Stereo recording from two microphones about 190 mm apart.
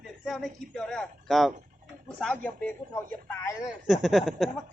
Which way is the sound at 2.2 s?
5° left (ahead or behind).